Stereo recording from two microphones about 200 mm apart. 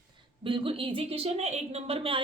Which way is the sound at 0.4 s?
25° right (ahead or behind).